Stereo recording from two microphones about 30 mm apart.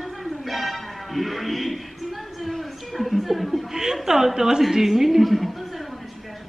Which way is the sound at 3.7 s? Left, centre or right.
Centre.